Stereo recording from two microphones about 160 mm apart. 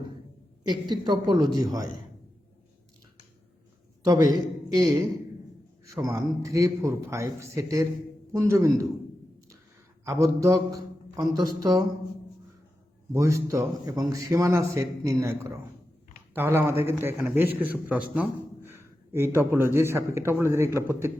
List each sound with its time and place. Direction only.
0.7 s a man's voice: 25° right (ahead or behind)
4.0 s a man's voice: 25° right (ahead or behind)
10.0 s a man's voice: 20° right (ahead or behind)
13.1 s a man's voice: 20° right (ahead or behind)